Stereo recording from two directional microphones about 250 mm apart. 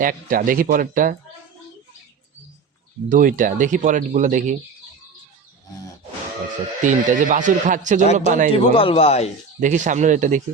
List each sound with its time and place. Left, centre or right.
0.0 s speech: right
3.1 s speech: right
6.8 s speech: right
8.5 s speech: left
9.6 s speech: right